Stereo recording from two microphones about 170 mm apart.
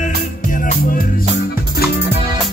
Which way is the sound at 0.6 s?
55° left (ahead or behind).